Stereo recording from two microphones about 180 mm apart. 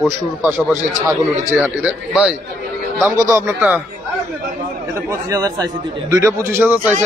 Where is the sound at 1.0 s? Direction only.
10° right (ahead or behind).